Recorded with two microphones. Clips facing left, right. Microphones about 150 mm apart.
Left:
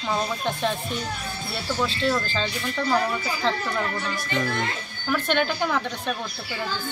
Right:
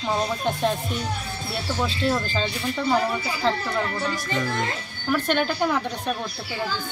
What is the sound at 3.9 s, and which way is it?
Speech, 35° right (ahead or behind).